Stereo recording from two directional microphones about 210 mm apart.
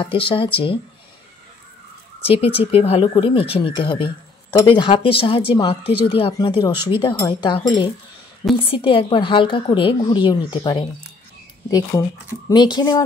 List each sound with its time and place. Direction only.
0.0 s speech: 25° left (ahead or behind)
2.2 s speech: 25° left (ahead or behind)
12.7 s speech: 20° left (ahead or behind)